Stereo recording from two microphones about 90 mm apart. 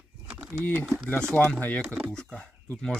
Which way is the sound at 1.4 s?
20° left (ahead or behind).